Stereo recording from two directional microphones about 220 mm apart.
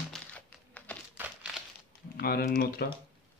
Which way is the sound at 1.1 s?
5° right (ahead or behind).